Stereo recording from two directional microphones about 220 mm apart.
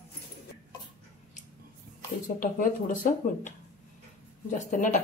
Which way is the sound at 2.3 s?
40° left (ahead or behind).